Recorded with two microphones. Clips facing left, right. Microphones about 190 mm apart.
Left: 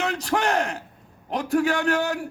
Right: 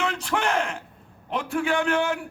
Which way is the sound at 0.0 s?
40° left (ahead or behind).